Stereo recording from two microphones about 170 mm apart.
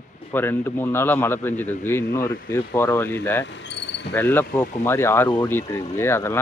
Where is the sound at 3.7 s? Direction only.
90° left.